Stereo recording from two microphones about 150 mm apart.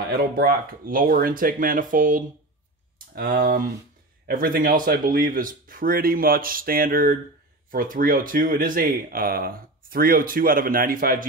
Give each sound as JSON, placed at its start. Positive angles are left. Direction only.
{"t": 0.1, "sound": "speech", "side_deg": -75}
{"t": 3.2, "sound": "speech", "side_deg": -80}